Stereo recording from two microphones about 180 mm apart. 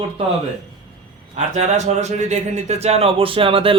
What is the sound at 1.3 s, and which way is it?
A man's voice, 40° right (ahead or behind).